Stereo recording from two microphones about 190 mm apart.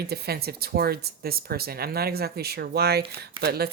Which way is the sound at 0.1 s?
55° right (ahead or behind).